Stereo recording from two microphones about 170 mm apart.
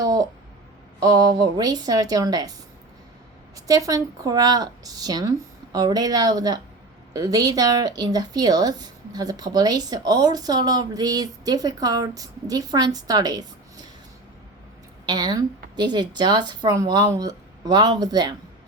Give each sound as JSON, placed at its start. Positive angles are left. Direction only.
{"t": 0.0, "sound": "a sound", "side_deg": -20}
{"t": 0.9, "sound": "speech", "side_deg": -20}
{"t": 3.5, "sound": "speech", "side_deg": -20}
{"t": 15.0, "sound": "speech", "side_deg": -25}